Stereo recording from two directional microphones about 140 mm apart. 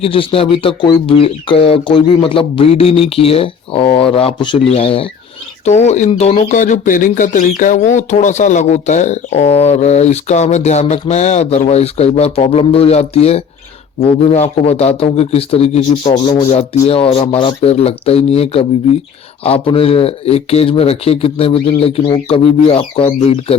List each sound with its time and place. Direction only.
0.0 s speech: 40° left (ahead or behind)
5.6 s speech: 55° left (ahead or behind)
6.5 s speech: 70° left (ahead or behind); by 15.8 s 45° left (ahead or behind)
16.0 s speech: 25° left (ahead or behind)
16.5 s speech: 50° left (ahead or behind)